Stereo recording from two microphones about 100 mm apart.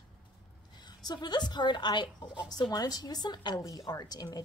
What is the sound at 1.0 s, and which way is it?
A woman's voice, 45° left (ahead or behind).